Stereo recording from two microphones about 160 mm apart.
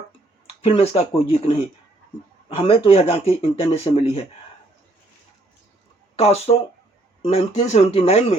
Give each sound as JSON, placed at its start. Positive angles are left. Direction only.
{"t": 0.4, "sound": "speech", "side_deg": 40}
{"t": 2.6, "sound": "speech", "side_deg": 35}
{"t": 6.1, "sound": "speech", "side_deg": 40}